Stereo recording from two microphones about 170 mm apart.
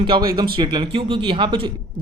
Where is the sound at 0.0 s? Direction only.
25° right (ahead or behind).